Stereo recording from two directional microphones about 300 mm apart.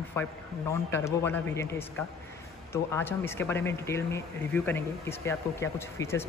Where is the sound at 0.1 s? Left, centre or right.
Centre.